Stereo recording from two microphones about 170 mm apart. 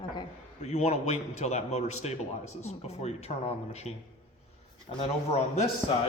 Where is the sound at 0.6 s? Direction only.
40° left (ahead or behind).